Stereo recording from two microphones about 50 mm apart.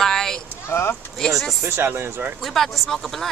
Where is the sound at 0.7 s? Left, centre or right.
Left.